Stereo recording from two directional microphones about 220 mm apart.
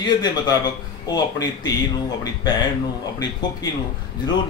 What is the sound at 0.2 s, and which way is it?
Speech, 15° left (ahead or behind).